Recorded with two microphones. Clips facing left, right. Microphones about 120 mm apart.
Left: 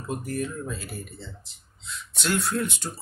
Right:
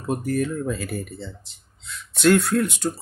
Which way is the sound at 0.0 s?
70° right (ahead or behind).